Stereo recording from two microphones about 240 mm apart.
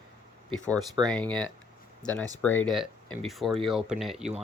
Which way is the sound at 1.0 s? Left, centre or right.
Centre.